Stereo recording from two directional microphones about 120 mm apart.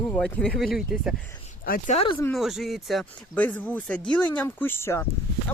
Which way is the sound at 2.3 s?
Centre (ahead or behind).